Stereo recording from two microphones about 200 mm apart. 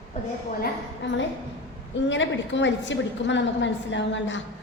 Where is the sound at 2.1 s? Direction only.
65° left (ahead or behind).